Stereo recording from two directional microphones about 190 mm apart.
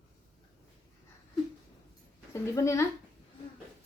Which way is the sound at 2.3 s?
15° left (ahead or behind).